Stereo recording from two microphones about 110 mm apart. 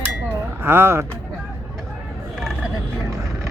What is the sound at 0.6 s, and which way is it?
Speech, 20° right (ahead or behind).